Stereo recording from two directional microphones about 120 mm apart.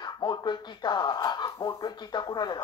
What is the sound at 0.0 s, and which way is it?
Speech, 40° left (ahead or behind).